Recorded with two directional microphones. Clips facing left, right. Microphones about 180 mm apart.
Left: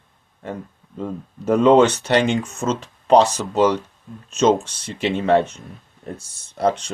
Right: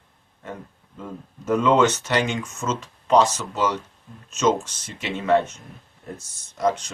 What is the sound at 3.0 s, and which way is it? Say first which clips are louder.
Speech: left 4 dB; 35° left (ahead or behind).